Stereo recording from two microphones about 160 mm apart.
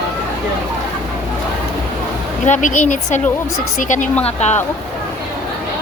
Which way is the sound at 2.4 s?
50° left (ahead or behind).